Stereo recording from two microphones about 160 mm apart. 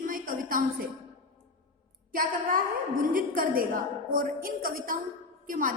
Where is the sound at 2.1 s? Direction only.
60° right (ahead or behind).